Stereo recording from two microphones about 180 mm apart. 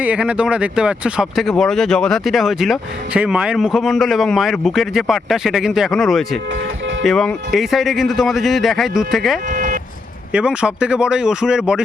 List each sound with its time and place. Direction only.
0.0 s speech: 5° right (ahead or behind)
9.5 s vehicle: 45° right (ahead or behind)
10.3 s speech: 5° right (ahead or behind)